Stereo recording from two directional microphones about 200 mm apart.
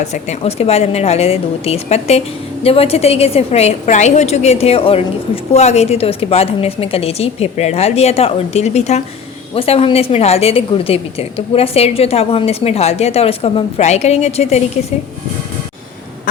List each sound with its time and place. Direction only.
0.0 s a woman's voice: 35° left (ahead or behind)